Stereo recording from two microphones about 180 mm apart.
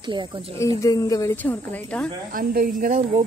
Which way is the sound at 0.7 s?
20° left (ahead or behind).